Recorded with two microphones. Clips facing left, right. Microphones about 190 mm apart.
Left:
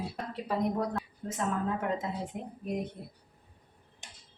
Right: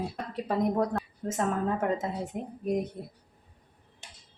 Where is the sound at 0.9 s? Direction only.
45° right (ahead or behind).